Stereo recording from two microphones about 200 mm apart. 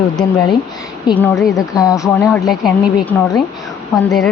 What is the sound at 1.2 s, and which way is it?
Speech, 15° left (ahead or behind).